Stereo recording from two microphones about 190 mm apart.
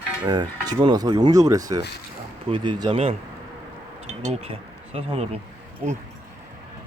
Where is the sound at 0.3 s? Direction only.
20° right (ahead or behind).